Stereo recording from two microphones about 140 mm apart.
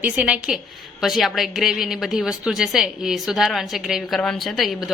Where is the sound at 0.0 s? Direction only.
10° right (ahead or behind).